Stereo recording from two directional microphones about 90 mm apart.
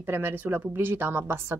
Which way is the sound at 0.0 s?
25° right (ahead or behind).